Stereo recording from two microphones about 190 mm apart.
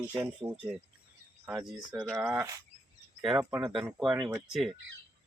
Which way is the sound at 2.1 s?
15° right (ahead or behind).